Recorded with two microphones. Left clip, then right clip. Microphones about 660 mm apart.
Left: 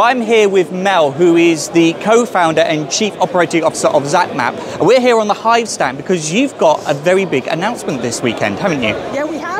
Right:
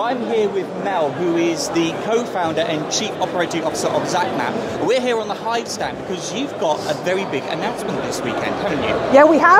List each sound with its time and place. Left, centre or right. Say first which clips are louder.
0.0 s speech: left 8 dB; left
6.3 s speech: left 8 dB; left
9.1 s speech: right 10 dB; right